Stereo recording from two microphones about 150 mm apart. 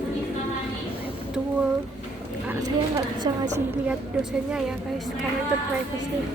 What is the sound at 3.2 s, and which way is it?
Speech, 25° right (ahead or behind).